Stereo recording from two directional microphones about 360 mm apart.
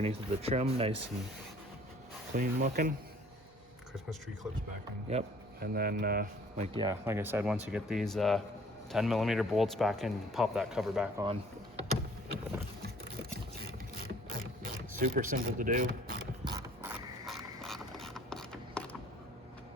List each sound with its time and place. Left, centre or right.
0.0 s speech: centre
2.3 s speech: right
5.0 s speech: right
6.7 s speech: centre
13.9 s mechanisms: right
16.4 s mechanisms: centre